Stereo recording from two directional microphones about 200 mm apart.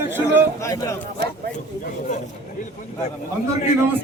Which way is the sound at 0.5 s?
15° left (ahead or behind).